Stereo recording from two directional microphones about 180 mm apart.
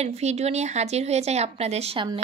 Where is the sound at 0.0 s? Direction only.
35° right (ahead or behind).